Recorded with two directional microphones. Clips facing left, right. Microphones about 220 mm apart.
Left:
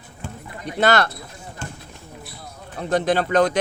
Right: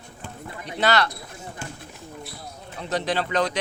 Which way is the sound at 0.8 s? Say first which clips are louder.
Left 3 dB; 50° left (ahead or behind).